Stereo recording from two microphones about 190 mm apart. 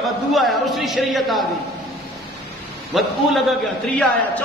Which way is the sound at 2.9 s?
Centre (ahead or behind).